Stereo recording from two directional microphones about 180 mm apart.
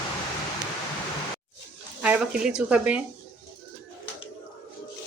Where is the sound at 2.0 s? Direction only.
5° right (ahead or behind).